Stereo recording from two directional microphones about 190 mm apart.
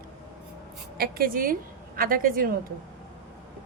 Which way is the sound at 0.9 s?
50° right (ahead or behind).